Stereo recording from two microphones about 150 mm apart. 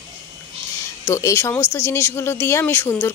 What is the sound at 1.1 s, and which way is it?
Speech, 20° left (ahead or behind).